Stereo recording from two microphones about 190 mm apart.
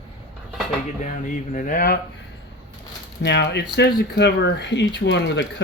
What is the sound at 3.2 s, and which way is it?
Speech, 65° left (ahead or behind).